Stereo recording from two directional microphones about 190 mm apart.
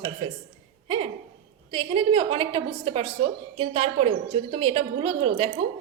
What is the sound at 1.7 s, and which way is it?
A woman's voice, 25° right (ahead or behind).